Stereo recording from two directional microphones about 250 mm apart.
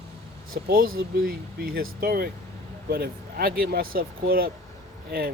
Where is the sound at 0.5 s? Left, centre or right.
Right.